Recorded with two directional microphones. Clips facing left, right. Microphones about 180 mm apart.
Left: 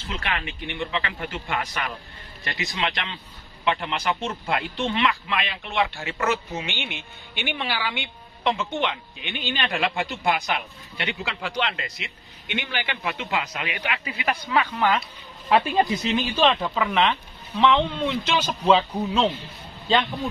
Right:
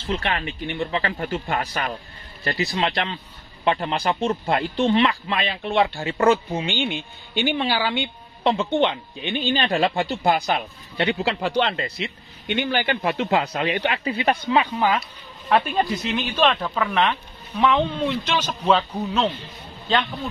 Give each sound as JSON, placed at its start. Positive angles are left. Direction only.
{"t": 0.1, "sound": "speech", "side_deg": -35}
{"t": 15.4, "sound": "speech", "side_deg": 0}
{"t": 18.2, "sound": "speech", "side_deg": 10}